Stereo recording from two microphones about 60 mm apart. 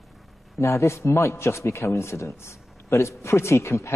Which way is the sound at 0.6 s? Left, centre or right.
Left.